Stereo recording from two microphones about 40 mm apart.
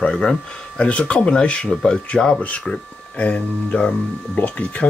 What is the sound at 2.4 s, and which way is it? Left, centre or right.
Speech, left.